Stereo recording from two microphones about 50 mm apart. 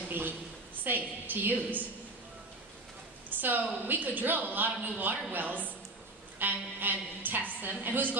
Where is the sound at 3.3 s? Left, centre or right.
Right.